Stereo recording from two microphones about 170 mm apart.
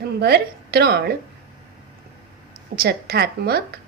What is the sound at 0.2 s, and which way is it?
Speech, 70° right (ahead or behind).